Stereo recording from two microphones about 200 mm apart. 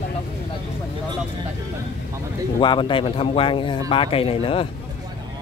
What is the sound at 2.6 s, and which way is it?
Speech, 25° left (ahead or behind).